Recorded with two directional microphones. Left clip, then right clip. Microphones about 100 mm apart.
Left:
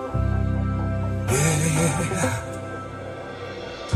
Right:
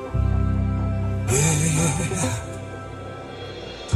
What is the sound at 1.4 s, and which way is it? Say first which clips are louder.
Music: even; 30° left (ahead or behind).